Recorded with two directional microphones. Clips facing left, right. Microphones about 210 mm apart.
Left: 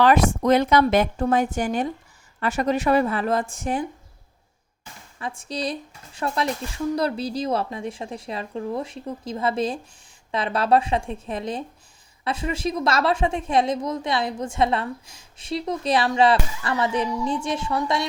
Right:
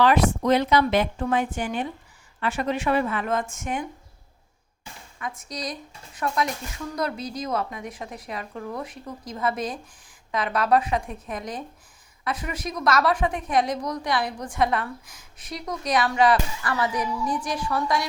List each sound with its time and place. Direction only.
0.0 s a woman's voice: 45° left (ahead or behind)
5.2 s a woman's voice: 30° left (ahead or behind)